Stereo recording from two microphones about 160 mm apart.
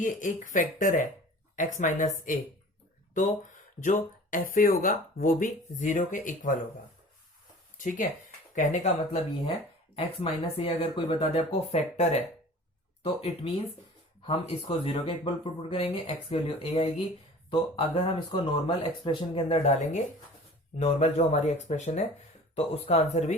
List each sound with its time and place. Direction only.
0.0 s speech: 55° left (ahead or behind)
3.8 s speech: 55° left (ahead or behind)
7.8 s speech: 55° left (ahead or behind)